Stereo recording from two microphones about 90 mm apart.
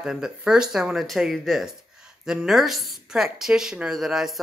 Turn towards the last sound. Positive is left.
turn(degrees=-5)  # may be behind; listen again after turning